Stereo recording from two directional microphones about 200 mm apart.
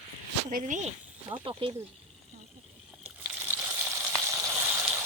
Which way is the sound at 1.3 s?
25° right (ahead or behind).